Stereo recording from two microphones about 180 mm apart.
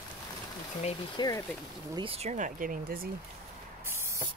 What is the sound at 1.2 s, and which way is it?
Speech, 20° left (ahead or behind).